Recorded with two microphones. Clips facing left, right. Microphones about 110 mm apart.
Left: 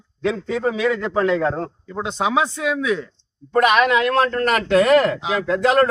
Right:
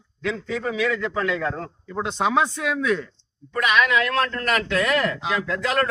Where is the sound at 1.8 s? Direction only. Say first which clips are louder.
Even; 5° left (ahead or behind).